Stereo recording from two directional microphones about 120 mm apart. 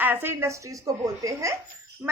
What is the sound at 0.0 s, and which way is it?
Speech, 15° right (ahead or behind).